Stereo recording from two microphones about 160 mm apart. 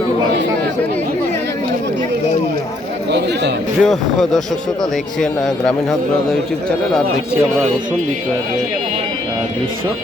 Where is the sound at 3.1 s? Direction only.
90° right.